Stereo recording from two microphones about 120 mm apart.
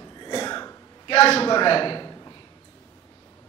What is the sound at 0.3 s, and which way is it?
Throat clearing, 40° left (ahead or behind).